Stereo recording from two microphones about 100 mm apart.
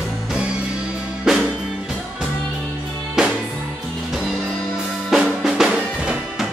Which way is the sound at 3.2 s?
5° right (ahead or behind).